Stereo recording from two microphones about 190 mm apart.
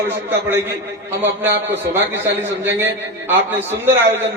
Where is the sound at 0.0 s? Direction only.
10° right (ahead or behind).